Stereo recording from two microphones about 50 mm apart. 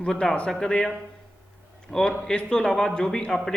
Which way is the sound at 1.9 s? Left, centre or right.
Centre.